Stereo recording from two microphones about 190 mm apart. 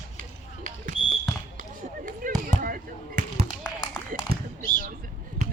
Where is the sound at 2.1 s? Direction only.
45° right (ahead or behind).